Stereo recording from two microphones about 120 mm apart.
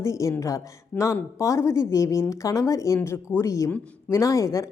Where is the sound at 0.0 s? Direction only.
25° left (ahead or behind).